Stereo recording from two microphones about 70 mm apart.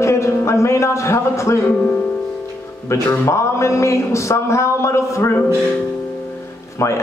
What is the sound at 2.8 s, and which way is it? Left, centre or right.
A man's voice, left.